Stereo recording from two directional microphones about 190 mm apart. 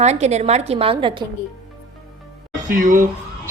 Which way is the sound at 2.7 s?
45° right (ahead or behind).